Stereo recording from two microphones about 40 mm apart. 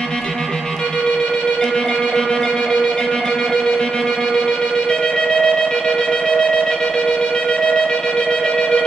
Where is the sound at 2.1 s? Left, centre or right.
Centre.